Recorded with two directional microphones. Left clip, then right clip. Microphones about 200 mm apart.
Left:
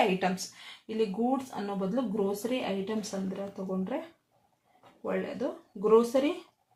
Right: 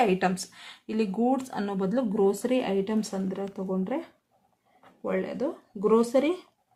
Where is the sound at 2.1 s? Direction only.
35° right (ahead or behind).